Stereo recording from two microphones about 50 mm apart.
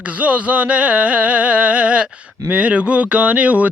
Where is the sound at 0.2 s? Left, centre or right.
Right.